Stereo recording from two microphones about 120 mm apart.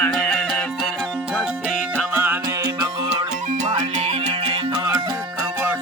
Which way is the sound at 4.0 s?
60° right (ahead or behind).